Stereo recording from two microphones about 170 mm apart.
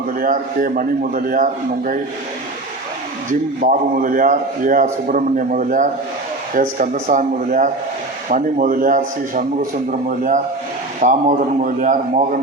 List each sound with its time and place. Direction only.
0.2 s a man's voice: 55° right (ahead or behind)
3.6 s a man's voice: 50° right (ahead or behind)